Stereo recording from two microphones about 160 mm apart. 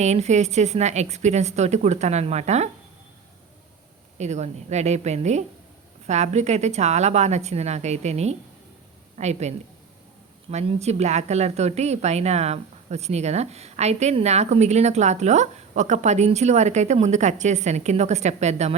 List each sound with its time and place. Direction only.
0.0 s speech: 45° right (ahead or behind)
4.2 s speech: 45° right (ahead or behind)